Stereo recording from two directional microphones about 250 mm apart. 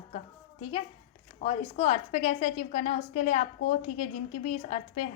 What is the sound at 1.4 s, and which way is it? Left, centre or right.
A woman's voice, left.